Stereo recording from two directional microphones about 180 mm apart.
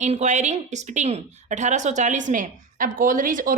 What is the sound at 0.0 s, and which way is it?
A woman's voice, 40° right (ahead or behind).